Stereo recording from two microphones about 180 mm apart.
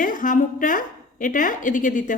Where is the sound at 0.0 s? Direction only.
50° left (ahead or behind).